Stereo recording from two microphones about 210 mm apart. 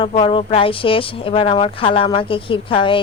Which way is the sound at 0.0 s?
25° left (ahead or behind).